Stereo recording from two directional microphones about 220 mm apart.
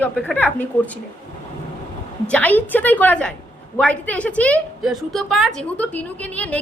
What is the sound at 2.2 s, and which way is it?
A woman's voice, 5° left (ahead or behind).